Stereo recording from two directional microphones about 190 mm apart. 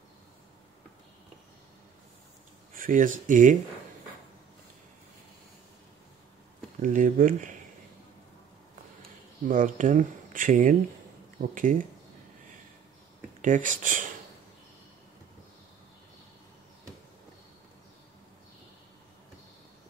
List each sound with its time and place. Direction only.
2.7 s speech: 45° right (ahead or behind)
6.8 s speech: 45° right (ahead or behind)
9.5 s speech: 45° right (ahead or behind)
13.4 s speech: 40° right (ahead or behind)